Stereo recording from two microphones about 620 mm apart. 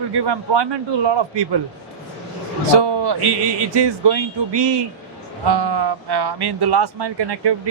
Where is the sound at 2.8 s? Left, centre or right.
Right.